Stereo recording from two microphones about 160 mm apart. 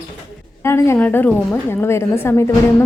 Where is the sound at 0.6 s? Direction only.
15° left (ahead or behind).